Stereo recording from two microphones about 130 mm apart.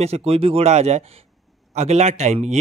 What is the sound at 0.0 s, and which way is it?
Speech, 50° right (ahead or behind).